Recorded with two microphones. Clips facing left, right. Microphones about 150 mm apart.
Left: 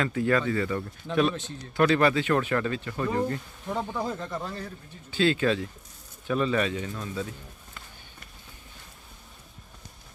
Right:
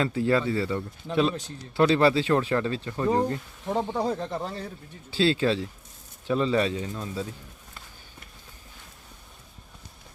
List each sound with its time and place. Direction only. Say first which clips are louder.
0.0 s a man's voice: right 1 dB; 25° right (ahead or behind)
1.8 s speech: right 2 dB; 25° right (ahead or behind)